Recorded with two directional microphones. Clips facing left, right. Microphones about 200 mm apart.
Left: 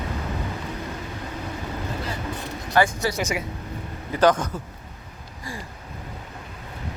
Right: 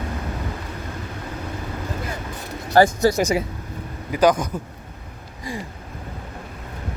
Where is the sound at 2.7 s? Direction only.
40° right (ahead or behind).